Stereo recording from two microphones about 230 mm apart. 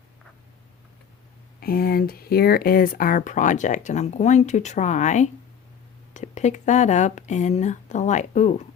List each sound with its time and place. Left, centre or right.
1.6 s speech: left